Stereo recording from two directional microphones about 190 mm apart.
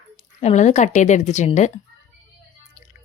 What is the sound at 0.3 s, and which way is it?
Speech, 35° left (ahead or behind).